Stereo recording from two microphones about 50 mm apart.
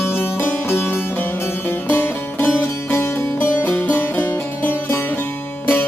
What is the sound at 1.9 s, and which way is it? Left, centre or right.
Music, left.